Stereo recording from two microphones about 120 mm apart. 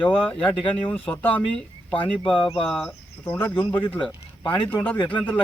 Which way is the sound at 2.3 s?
50° left (ahead or behind).